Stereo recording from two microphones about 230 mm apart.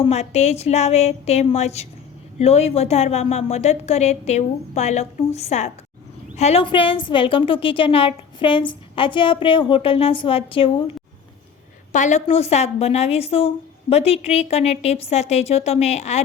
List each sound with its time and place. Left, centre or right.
0.0 s a woman's voice: left